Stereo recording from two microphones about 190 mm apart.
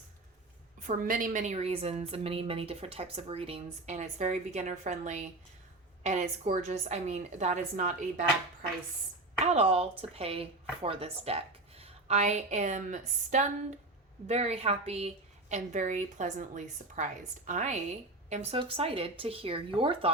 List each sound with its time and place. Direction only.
0.8 s a woman's voice: 45° right (ahead or behind)
9.4 s a woman's voice: 35° right (ahead or behind)